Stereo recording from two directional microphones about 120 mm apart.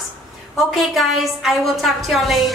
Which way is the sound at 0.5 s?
Centre (ahead or behind).